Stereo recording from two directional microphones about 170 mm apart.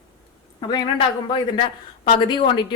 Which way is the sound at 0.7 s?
30° left (ahead or behind).